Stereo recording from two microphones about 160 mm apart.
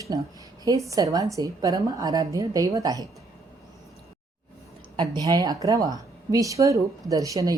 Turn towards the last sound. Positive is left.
turn(degrees=-20)  # may be behind; listen again after turning